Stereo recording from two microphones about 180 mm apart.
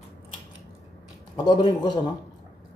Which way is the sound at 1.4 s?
25° left (ahead or behind).